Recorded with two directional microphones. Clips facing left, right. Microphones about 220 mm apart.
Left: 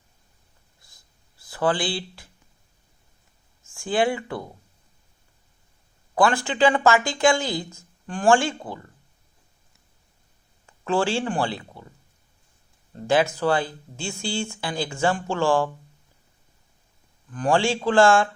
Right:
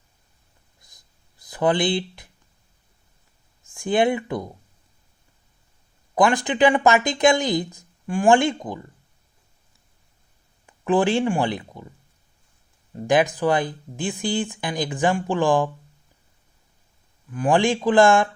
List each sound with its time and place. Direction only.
0.8 s a sound: 20° right (ahead or behind)
3.7 s speech: 20° right (ahead or behind)
6.1 s speech: 20° right (ahead or behind)
10.7 s speech: 20° right (ahead or behind)
12.9 s speech: 15° right (ahead or behind)
17.3 s speech: 15° right (ahead or behind)